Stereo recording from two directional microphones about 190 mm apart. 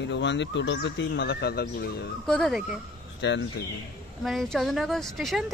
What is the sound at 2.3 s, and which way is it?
Speech, centre (ahead or behind).